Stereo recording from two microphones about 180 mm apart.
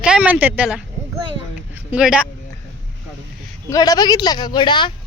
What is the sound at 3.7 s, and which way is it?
Speech, 20° left (ahead or behind).